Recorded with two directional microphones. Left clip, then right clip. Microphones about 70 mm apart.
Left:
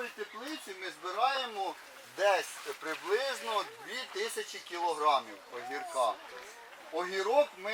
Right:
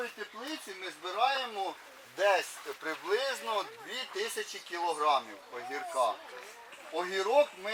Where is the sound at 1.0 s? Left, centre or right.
Right.